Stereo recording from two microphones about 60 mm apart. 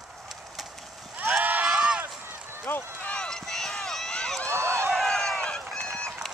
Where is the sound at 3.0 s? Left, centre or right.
Centre.